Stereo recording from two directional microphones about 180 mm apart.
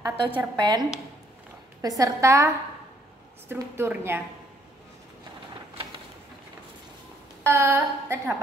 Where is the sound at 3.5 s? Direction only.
15° right (ahead or behind).